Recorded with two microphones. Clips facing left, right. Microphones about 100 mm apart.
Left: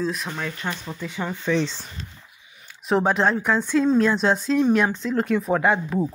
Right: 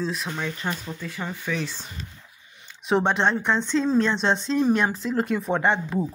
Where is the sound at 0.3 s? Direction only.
15° left (ahead or behind).